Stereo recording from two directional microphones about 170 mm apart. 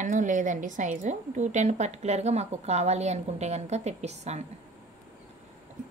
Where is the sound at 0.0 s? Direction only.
50° right (ahead or behind).